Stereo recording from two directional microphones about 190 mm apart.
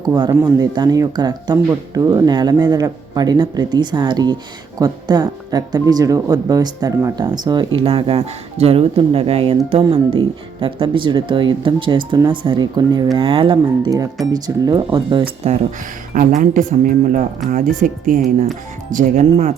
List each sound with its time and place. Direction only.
0.0 s speech: 20° right (ahead or behind)
16.1 s speech: 45° right (ahead or behind)